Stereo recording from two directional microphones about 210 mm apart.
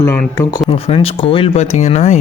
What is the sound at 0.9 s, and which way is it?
Speech, 25° left (ahead or behind).